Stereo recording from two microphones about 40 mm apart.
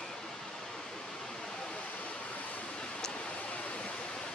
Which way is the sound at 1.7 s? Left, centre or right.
Left.